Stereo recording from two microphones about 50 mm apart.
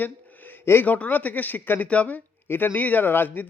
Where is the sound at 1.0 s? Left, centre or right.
Left.